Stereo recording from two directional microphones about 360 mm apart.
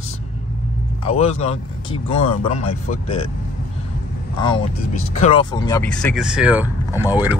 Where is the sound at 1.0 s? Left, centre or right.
Centre.